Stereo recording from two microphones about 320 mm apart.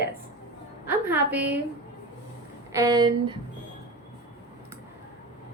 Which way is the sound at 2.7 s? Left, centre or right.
Centre.